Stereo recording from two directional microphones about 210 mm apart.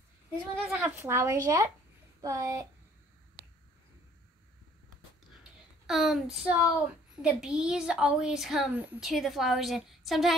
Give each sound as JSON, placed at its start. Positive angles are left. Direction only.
{"t": 0.7, "sound": "speech", "side_deg": -10}
{"t": 5.9, "sound": "a woman's voice", "side_deg": 0}